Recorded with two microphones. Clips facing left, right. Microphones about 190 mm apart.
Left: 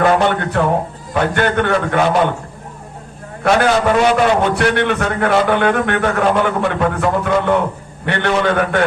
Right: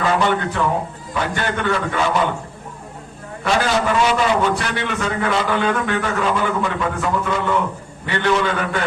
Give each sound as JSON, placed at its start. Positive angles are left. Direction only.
{"t": 0.0, "sound": "a man's voice", "side_deg": 60}
{"t": 3.4, "sound": "a man's voice", "side_deg": 55}